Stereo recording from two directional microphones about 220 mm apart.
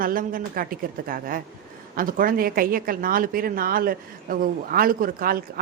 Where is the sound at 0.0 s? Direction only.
40° right (ahead or behind).